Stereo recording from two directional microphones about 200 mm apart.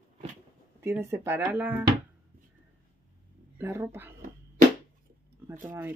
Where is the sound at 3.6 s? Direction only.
10° right (ahead or behind).